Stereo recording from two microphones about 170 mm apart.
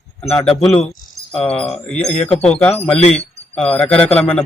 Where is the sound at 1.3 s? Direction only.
5° left (ahead or behind).